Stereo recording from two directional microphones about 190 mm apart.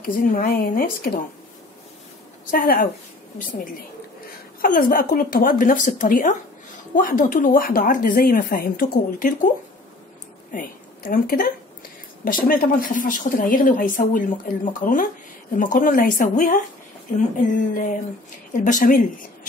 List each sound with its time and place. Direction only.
0.0 s speech: 50° left (ahead or behind)
2.5 s speech: 50° left (ahead or behind)
4.6 s speech: 50° left (ahead or behind)
10.5 s a woman's voice: 45° left (ahead or behind)
18.5 s speech: 45° left (ahead or behind)